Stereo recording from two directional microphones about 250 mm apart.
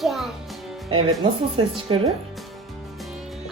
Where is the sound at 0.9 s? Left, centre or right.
Right.